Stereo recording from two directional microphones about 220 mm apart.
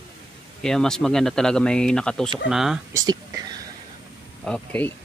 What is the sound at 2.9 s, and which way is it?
Speech, 15° right (ahead or behind).